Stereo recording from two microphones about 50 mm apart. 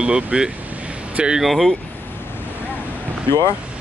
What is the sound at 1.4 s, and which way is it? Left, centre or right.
Speech, centre.